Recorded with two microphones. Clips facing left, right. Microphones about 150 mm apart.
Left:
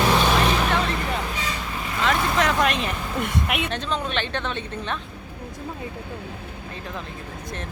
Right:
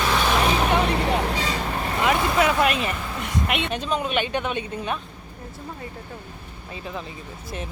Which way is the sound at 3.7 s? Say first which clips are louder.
Right 2 dB; 10° right (ahead or behind).